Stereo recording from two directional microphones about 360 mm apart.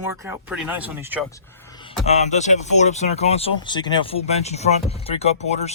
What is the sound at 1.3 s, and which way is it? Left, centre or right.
Speech, centre.